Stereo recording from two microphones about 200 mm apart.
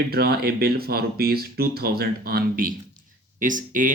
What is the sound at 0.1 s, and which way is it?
Speech, 50° right (ahead or behind).